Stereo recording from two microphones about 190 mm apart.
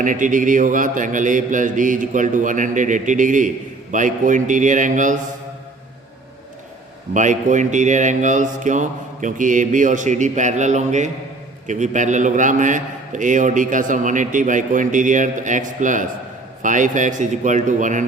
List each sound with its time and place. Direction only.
0.0 s a man's voice: 45° right (ahead or behind)
7.1 s a man's voice: 40° right (ahead or behind)